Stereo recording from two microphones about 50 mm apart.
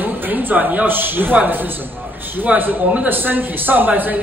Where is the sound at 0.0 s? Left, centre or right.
Right.